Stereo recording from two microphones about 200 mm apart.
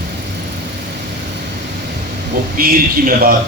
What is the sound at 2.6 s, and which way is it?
Speech, 45° right (ahead or behind).